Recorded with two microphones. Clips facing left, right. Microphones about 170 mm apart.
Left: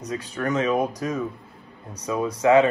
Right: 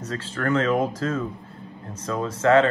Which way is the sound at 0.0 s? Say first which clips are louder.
Even; 15° left (ahead or behind).